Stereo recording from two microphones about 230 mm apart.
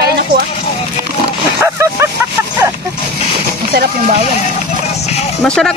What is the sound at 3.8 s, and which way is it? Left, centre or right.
Speech, right.